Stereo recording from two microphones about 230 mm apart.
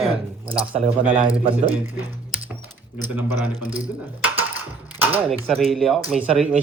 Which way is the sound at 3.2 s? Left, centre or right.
Centre.